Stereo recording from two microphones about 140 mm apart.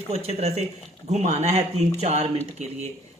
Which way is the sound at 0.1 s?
50° right (ahead or behind).